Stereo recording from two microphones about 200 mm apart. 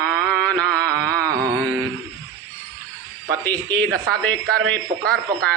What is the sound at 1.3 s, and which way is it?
Mantra, 55° right (ahead or behind).